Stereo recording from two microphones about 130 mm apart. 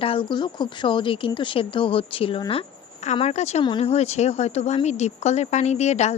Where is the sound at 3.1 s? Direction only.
55° left (ahead or behind).